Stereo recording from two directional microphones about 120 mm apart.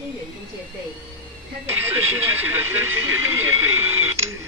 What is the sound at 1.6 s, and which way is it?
Speech, 20° right (ahead or behind).